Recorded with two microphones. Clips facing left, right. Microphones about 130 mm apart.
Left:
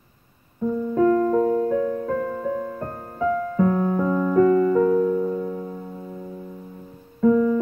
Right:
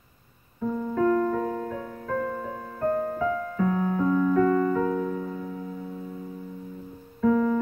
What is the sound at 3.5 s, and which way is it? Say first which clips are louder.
Music: left 5 dB; 30° left (ahead or behind).